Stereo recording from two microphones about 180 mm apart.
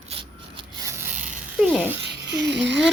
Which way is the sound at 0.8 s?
15° right (ahead or behind).